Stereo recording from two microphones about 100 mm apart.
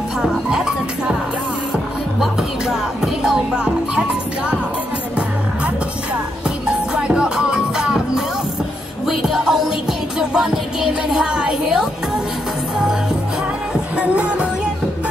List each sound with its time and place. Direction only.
0.2 s music: 5° right (ahead or behind)
2.7 s music: 5° right (ahead or behind)
7.0 s music: 10° right (ahead or behind)
13.9 s music: 10° right (ahead or behind)